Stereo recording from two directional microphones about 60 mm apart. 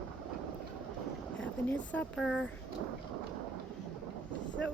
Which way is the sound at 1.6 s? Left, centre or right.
Left.